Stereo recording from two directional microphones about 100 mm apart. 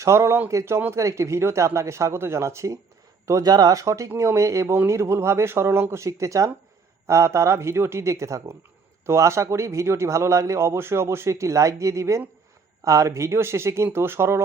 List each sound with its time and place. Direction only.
0.0 s speech: 30° right (ahead or behind)